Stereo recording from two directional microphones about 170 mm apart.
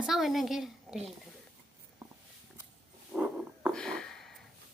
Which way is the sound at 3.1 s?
5° right (ahead or behind).